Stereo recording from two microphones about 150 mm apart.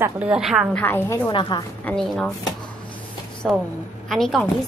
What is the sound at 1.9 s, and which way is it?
Speech, 5° left (ahead or behind).